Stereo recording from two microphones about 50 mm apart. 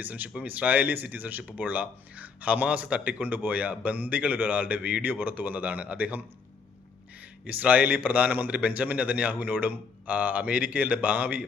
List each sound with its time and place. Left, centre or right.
0.0 s speech: right